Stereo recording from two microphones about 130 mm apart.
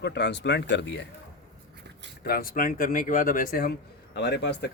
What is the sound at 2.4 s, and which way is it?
Speech, 90° left.